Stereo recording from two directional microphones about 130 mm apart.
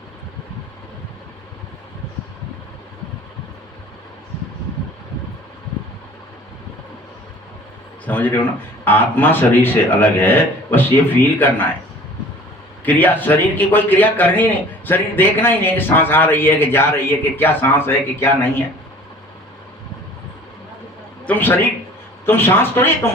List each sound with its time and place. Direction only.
8.0 s a man's voice: 15° left (ahead or behind)
12.8 s a man's voice: 15° left (ahead or behind)
21.2 s a man's voice: 15° left (ahead or behind)